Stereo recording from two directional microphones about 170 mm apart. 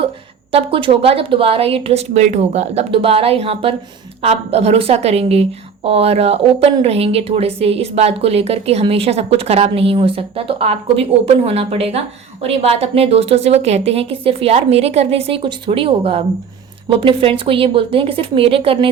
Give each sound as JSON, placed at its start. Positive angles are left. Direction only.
{"t": 0.5, "sound": "a woman's voice", "side_deg": -30}